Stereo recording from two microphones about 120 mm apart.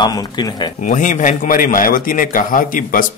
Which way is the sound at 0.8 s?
90° left.